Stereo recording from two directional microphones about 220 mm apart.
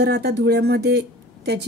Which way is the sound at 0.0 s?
50° right (ahead or behind).